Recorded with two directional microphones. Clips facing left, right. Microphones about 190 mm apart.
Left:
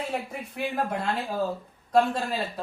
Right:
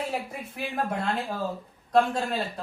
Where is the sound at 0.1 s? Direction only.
Centre (ahead or behind).